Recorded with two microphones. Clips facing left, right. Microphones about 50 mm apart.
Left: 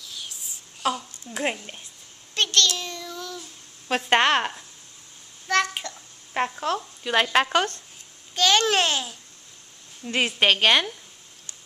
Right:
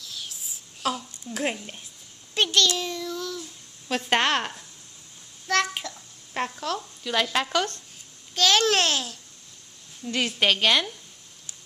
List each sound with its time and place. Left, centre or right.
0.0 s a sound: centre
1.3 s speech: centre
2.3 s child singing: centre
4.1 s speech: centre
5.5 s a sound: centre
6.3 s speech: left
8.4 s a child's voice: centre
10.0 s a woman's voice: left